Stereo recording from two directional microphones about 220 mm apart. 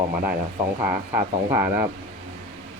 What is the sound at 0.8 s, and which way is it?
Speech, 10° right (ahead or behind).